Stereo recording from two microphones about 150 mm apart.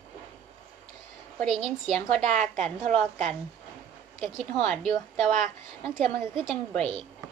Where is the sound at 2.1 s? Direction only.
50° right (ahead or behind).